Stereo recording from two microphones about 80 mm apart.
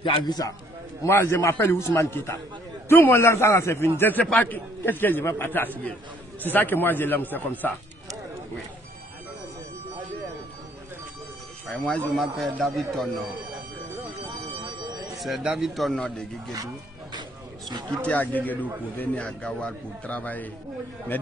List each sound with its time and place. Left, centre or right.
0.0 s a man's voice: left
1.0 s a man's voice: left
11.7 s a man's voice: centre
12.5 s speech: centre
14.6 s bell: right
15.1 s speech: centre
15.9 s a man's voice: centre
17.6 s speech: right
18.0 s a man's voice: left